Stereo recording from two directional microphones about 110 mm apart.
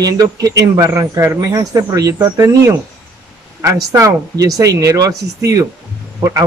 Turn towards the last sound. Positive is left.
turn(degrees=-30)  # may be behind; listen again after turning